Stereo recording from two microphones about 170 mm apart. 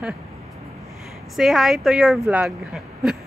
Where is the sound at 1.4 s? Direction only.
Centre (ahead or behind).